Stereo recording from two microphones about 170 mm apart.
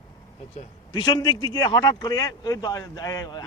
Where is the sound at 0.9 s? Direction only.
25° left (ahead or behind).